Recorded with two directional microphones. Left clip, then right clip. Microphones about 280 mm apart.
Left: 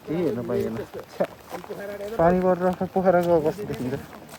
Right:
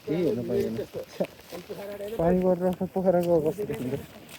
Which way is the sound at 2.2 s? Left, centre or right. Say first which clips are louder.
Left 4 dB; centre.